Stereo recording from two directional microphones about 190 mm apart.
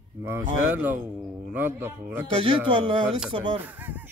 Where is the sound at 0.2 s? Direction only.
15° right (ahead or behind).